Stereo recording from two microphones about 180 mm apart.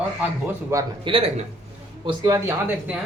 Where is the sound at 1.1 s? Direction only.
30° right (ahead or behind).